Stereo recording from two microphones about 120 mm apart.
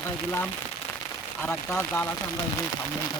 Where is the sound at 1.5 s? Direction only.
20° left (ahead or behind).